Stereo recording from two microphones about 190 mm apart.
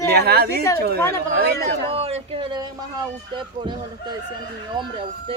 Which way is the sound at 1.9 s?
30° right (ahead or behind).